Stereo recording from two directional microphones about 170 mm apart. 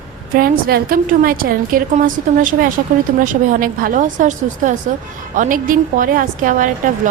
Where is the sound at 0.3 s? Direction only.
60° right (ahead or behind).